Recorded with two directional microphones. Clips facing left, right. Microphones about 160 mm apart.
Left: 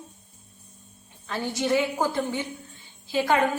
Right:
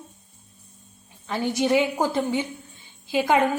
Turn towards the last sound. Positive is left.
turn(degrees=-15)  # may be behind; listen again after turning